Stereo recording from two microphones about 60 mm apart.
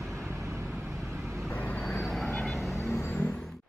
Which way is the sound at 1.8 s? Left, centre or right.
Centre.